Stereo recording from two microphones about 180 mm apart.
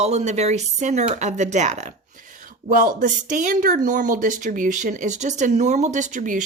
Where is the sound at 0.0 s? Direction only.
40° right (ahead or behind).